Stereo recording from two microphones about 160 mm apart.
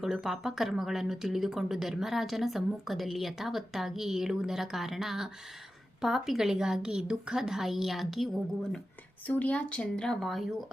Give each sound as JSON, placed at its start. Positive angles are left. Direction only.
{"t": 0.0, "sound": "a woman's voice", "side_deg": 0}